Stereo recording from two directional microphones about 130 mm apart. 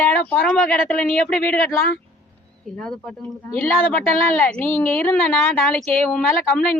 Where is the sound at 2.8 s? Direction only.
5° left (ahead or behind).